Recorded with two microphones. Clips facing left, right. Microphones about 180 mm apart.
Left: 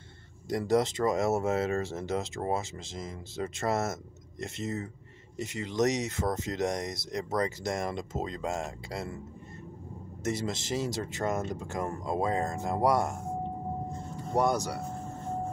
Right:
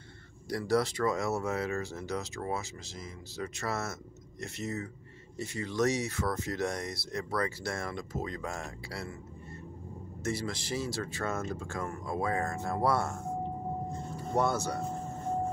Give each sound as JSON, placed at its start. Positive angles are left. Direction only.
{"t": 0.5, "sound": "speech", "side_deg": 20}
{"t": 10.2, "sound": "speech", "side_deg": 20}
{"t": 14.3, "sound": "speech", "side_deg": 15}